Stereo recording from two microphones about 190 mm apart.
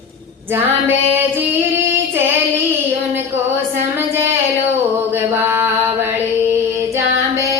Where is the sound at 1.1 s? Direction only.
10° right (ahead or behind).